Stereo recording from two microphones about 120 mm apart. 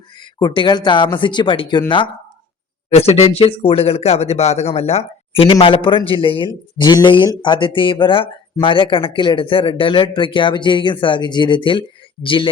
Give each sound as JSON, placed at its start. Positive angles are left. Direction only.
{"t": 0.2, "sound": "speech", "side_deg": 40}
{"t": 2.9, "sound": "speech", "side_deg": 60}